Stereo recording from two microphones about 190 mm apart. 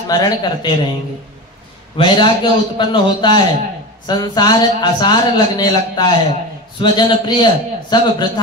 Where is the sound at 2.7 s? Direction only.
25° left (ahead or behind).